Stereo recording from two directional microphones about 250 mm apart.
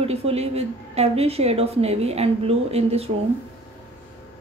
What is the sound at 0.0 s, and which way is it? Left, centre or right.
A woman's voice, right.